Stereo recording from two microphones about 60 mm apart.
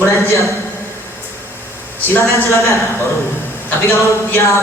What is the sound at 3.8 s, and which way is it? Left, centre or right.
Speech, left.